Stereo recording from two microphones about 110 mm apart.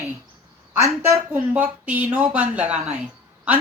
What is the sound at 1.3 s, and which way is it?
A woman's voice, 15° right (ahead or behind).